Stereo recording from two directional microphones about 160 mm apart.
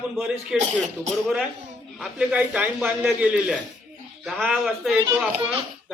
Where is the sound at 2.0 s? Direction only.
5° right (ahead or behind).